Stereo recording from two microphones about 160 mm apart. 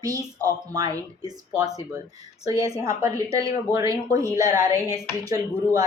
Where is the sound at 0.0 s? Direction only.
25° right (ahead or behind).